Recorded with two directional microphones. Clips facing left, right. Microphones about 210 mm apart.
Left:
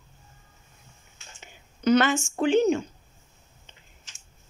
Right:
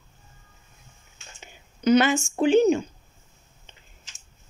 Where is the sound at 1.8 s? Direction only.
10° right (ahead or behind).